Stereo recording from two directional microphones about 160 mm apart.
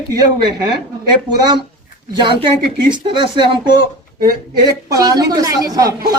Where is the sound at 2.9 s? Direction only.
30° right (ahead or behind).